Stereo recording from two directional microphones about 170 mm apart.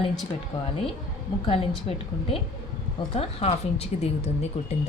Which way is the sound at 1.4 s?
35° left (ahead or behind).